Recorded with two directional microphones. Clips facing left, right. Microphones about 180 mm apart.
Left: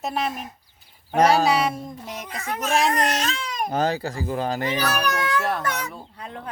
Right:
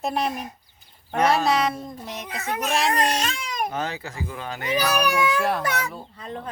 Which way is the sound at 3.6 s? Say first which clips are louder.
Left 6 dB; 35° left (ahead or behind).